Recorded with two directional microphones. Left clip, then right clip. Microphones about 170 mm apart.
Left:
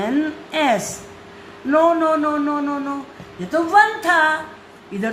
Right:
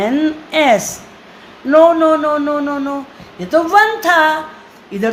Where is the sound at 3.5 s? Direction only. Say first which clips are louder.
Right 4 dB; 55° right (ahead or behind).